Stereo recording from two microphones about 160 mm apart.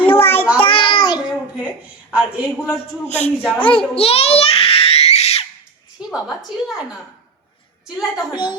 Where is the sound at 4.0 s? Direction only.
40° left (ahead or behind).